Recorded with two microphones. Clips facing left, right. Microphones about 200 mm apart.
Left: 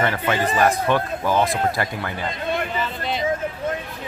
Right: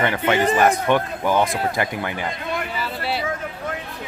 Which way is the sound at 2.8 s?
5° right (ahead or behind).